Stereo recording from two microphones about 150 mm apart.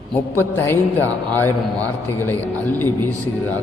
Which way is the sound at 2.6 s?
15° left (ahead or behind).